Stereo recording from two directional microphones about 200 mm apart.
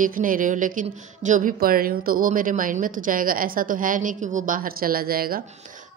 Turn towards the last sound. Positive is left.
turn(degrees=-45)  # may be behind; listen again after turning